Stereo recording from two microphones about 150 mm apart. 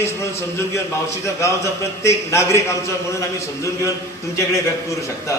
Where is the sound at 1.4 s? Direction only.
20° left (ahead or behind).